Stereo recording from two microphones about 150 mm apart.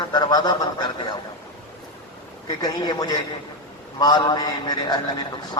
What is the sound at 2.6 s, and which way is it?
A man's voice, 25° left (ahead or behind).